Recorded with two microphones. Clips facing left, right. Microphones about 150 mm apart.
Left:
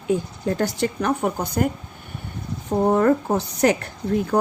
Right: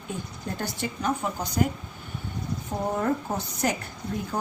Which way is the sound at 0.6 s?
75° left (ahead or behind).